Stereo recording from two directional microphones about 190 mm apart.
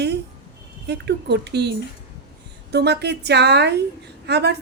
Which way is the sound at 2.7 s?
60° right (ahead or behind).